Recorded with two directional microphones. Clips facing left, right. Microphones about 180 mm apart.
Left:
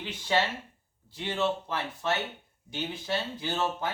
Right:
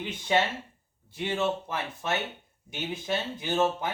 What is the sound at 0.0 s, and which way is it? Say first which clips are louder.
Speech: right 2 dB; 20° right (ahead or behind).